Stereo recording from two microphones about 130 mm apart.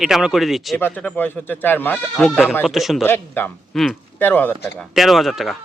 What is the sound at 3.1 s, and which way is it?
Speech, 15° left (ahead or behind).